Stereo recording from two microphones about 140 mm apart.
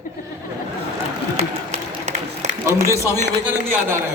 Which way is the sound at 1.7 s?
55° right (ahead or behind).